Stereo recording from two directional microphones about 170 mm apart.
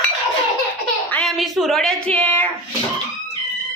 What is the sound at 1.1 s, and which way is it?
Speech, centre (ahead or behind).